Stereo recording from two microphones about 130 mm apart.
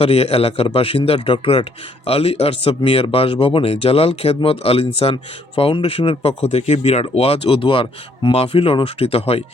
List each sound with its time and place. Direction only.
0.0 s speech: 50° left (ahead or behind)